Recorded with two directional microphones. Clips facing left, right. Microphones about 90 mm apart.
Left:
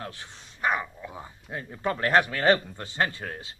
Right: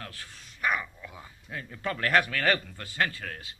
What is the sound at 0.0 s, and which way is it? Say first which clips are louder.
Speech: left 4 dB; 25° left (ahead or behind).